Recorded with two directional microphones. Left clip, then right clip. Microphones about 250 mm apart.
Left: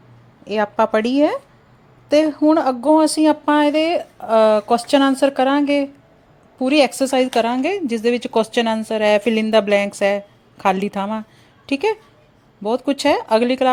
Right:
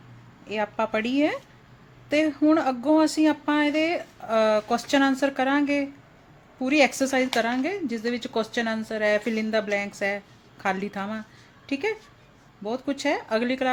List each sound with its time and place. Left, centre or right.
0.4 s speech: left